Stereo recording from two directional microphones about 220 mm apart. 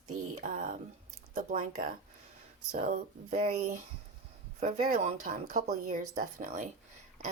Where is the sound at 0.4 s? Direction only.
35° right (ahead or behind).